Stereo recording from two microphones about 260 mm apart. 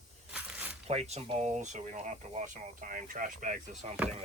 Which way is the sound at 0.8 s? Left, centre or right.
Right.